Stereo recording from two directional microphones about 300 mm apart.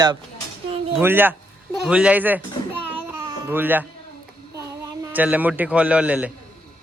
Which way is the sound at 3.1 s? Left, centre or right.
Centre.